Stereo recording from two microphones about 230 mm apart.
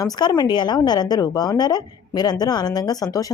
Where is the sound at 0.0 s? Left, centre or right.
Centre.